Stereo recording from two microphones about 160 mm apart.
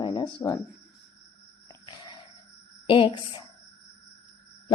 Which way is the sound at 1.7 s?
30° left (ahead or behind).